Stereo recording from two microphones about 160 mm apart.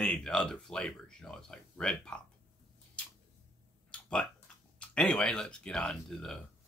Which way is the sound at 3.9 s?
5° left (ahead or behind).